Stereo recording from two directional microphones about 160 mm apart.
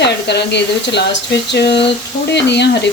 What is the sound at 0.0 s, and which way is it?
Speech, 90° left.